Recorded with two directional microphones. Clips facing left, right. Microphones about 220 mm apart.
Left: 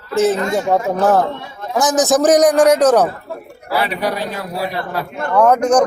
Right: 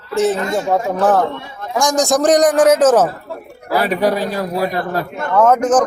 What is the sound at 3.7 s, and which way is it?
A man's voice, 45° right (ahead or behind).